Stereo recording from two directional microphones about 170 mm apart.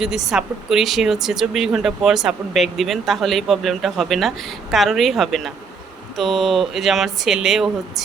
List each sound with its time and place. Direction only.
0.0 s speech: 5° right (ahead or behind)